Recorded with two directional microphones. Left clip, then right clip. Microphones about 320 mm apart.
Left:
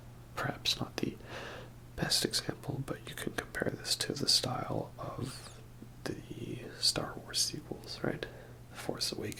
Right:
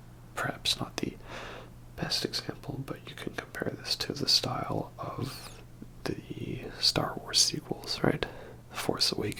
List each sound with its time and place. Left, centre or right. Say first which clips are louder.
0.3 s speech: right 3 dB; centre; by 9.3 s right